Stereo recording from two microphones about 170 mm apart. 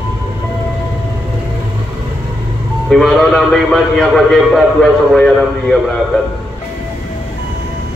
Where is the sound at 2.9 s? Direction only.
Centre (ahead or behind).